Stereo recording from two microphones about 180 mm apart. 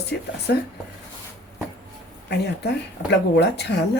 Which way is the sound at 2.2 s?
65° left (ahead or behind).